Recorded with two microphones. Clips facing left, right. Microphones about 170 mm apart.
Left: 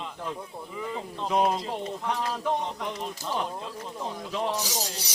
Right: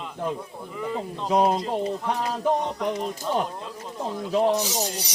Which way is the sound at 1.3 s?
30° right (ahead or behind).